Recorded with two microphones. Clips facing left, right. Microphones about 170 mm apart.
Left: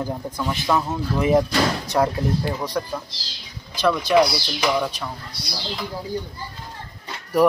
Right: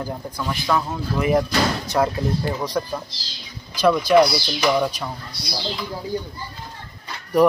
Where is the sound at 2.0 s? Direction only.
5° left (ahead or behind).